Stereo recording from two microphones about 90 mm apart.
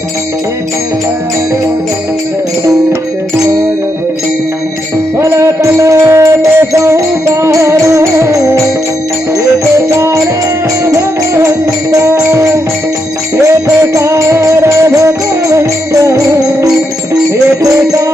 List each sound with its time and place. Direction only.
5.2 s music: 35° right (ahead or behind)
9.9 s music: 35° right (ahead or behind)
11.9 s music: 40° right (ahead or behind)
13.5 s music: 35° right (ahead or behind)